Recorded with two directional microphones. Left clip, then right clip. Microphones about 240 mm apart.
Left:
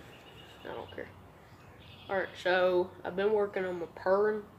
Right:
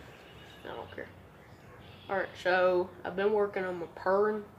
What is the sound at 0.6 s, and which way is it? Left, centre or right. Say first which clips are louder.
Speech: even; centre.